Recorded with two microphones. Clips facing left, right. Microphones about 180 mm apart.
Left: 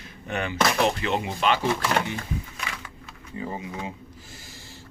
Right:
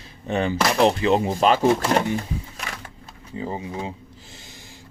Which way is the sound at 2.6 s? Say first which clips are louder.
Right 1 dB; 40° right (ahead or behind).